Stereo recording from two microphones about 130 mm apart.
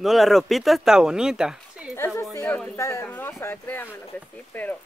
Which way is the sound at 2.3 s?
15° left (ahead or behind).